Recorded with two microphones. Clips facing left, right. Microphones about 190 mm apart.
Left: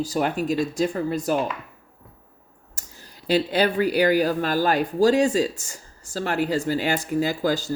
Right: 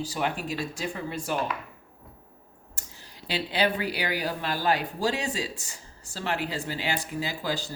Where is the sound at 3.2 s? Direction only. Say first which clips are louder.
Left 6 dB; 45° left (ahead or behind).